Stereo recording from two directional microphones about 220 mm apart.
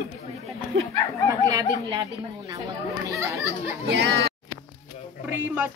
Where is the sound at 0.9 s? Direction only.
15° left (ahead or behind).